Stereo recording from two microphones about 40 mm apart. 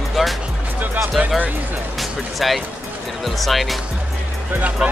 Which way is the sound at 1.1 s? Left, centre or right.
Right.